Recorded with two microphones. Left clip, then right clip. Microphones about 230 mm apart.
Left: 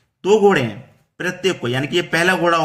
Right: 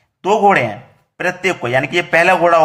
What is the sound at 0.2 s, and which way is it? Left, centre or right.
Speech, centre.